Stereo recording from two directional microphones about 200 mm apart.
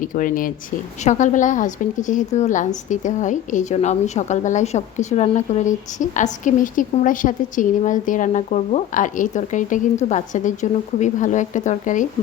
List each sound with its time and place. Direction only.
0.0 s a woman's voice: 40° left (ahead or behind)